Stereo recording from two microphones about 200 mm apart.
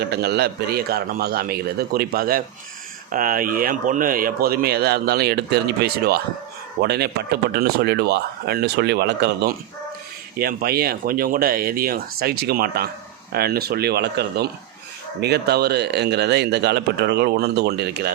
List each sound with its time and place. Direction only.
0.0 s a man's voice: 55° right (ahead or behind)